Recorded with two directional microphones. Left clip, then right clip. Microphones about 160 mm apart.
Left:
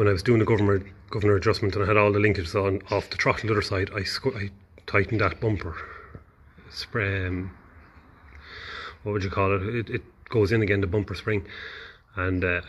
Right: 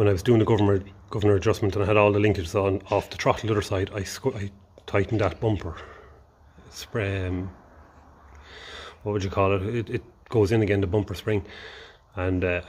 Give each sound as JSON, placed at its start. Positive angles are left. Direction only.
{"t": 0.0, "sound": "speech", "side_deg": -25}
{"t": 8.5, "sound": "speech", "side_deg": -25}